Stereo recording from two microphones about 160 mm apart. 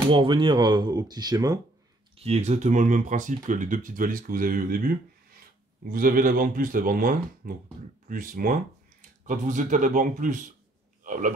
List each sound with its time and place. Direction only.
0.1 s speech: 30° right (ahead or behind)
2.1 s speech: 40° right (ahead or behind)